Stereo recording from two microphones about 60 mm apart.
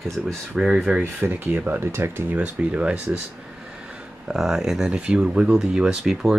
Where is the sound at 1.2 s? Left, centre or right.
Right.